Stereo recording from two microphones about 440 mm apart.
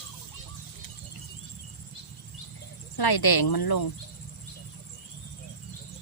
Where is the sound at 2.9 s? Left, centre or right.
Left.